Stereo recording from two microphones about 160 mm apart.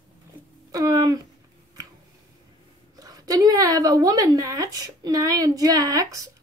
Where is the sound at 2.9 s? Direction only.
25° right (ahead or behind).